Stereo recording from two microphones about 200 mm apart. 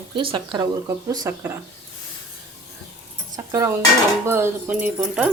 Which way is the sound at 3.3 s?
15° right (ahead or behind).